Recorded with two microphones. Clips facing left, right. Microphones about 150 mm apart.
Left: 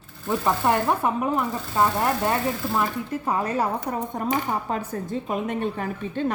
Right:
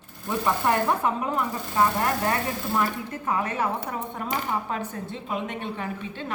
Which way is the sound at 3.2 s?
35° left (ahead or behind).